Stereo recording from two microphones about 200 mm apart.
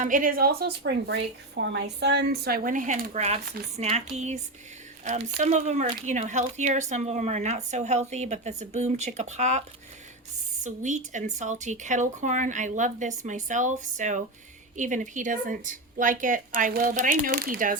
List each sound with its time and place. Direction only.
0.0 s a woman's voice: 40° right (ahead or behind)